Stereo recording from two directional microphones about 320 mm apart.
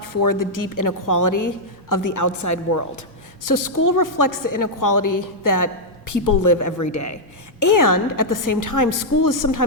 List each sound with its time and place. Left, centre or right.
0.0 s a woman's voice: left
3.4 s a woman's voice: left
7.6 s a woman's voice: left